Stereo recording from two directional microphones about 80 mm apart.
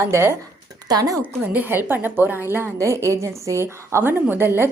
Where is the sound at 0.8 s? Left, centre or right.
Right.